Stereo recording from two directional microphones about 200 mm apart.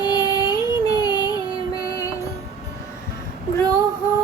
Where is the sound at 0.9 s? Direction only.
20° left (ahead or behind).